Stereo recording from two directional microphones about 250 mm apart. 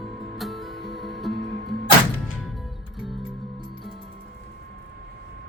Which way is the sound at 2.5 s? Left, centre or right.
Centre.